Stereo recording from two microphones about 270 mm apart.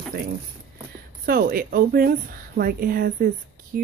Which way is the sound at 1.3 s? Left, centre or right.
Right.